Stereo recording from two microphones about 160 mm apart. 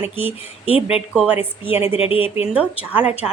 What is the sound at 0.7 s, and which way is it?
Speech, 40° left (ahead or behind).